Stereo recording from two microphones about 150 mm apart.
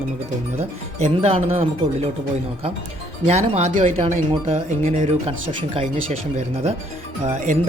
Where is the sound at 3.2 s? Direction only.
45° right (ahead or behind).